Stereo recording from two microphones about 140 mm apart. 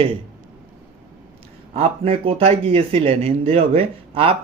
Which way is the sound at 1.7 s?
45° right (ahead or behind).